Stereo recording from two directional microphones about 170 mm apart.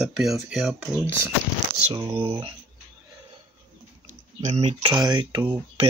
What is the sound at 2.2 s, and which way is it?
Speech, 30° right (ahead or behind).